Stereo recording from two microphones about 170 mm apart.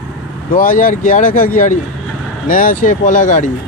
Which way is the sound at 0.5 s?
50° left (ahead or behind).